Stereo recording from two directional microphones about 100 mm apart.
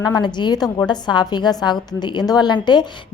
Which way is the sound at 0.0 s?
45° left (ahead or behind).